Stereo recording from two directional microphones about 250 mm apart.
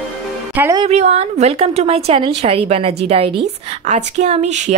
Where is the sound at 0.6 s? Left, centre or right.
Centre.